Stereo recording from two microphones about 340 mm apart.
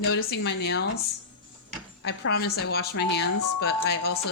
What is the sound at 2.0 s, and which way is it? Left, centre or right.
Speech, left.